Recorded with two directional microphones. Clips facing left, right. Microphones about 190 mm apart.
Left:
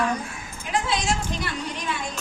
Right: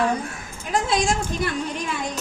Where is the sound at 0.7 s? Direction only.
50° right (ahead or behind).